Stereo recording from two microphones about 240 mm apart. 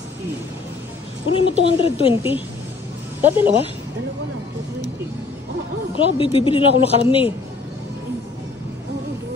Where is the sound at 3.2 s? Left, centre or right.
Centre.